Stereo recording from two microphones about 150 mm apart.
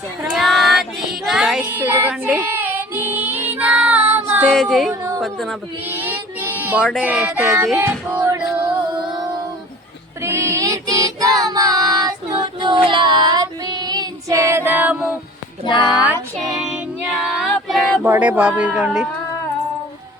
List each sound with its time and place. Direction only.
0.3 s child singing: centre (ahead or behind)
4.4 s music: 5° left (ahead or behind)
4.9 s a sound: 20° right (ahead or behind)
5.2 s speech: centre (ahead or behind)
5.8 s a sound: 10° right (ahead or behind)
7.3 s child singing: 20° right (ahead or behind)
7.5 s speech: 5° right (ahead or behind)
8.1 s female singing: 10° right (ahead or behind)
10.2 s child singing: 20° right (ahead or behind)
15.6 s speech: 30° left (ahead or behind)
16.6 s music: 5° right (ahead or behind)
18.0 s speech: 15° right (ahead or behind)